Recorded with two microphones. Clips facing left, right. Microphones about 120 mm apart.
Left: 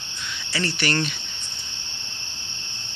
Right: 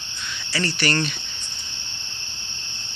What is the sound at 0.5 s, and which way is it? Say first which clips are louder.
Speech: right 1 dB; 20° left (ahead or behind).